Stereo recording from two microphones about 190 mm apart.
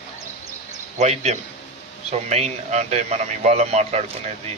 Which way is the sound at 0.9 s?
35° right (ahead or behind).